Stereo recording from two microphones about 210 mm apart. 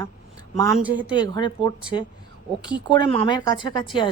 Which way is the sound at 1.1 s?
20° left (ahead or behind).